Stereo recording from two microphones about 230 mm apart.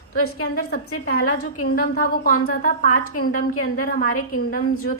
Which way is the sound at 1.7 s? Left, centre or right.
Left.